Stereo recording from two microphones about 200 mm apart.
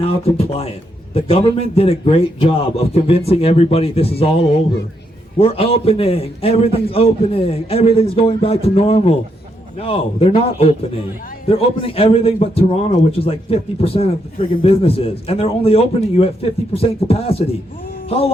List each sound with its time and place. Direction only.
0.0 s a man's voice: 30° left (ahead or behind)